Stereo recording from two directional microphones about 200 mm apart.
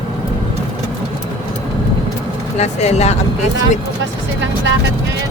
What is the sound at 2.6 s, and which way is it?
Speech, 35° left (ahead or behind).